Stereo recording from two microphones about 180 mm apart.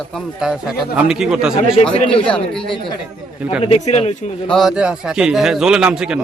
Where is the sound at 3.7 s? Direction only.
35° left (ahead or behind).